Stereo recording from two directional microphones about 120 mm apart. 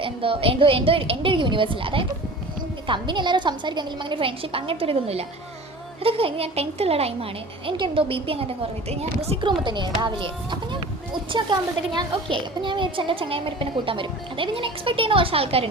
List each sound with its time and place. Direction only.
0.0 s a child's voice: 50° right (ahead or behind)
9.6 s a child's voice: 40° right (ahead or behind)